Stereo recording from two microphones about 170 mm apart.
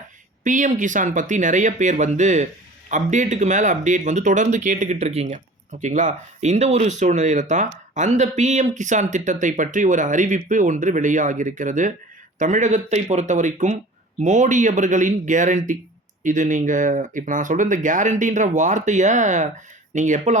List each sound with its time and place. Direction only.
0.4 s speech: 50° right (ahead or behind)